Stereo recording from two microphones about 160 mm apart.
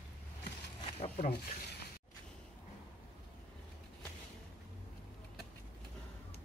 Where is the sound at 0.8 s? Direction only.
40° left (ahead or behind).